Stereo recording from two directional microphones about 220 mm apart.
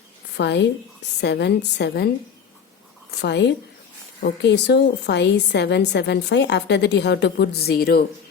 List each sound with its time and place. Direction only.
0.3 s a woman's voice: 50° left (ahead or behind)
3.1 s a woman's voice: 50° left (ahead or behind)